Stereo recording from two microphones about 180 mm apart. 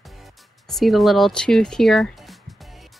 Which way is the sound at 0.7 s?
Centre (ahead or behind).